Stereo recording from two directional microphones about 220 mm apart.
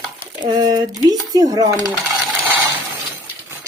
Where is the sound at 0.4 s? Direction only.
20° right (ahead or behind).